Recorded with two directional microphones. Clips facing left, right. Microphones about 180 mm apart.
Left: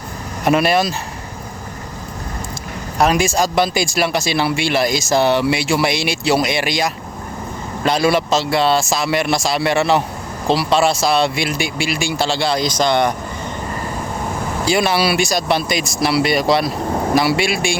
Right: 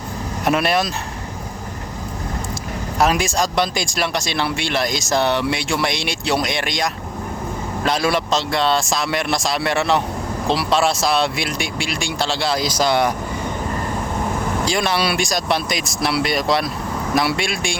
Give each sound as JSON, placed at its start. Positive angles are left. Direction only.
{"t": 0.4, "sound": "speech", "side_deg": 0}
{"t": 3.0, "sound": "speech", "side_deg": 0}
{"t": 14.6, "sound": "speech", "side_deg": 5}